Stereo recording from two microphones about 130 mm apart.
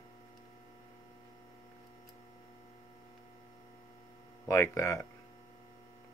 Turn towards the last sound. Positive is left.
turn(degrees=25)  # may be behind; listen again after turning